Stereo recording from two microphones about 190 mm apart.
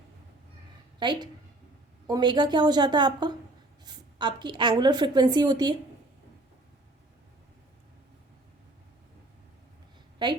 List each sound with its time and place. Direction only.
0.9 s a woman's voice: 25° right (ahead or behind)